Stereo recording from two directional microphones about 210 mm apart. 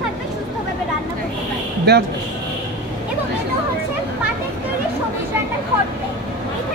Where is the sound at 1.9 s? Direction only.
55° right (ahead or behind).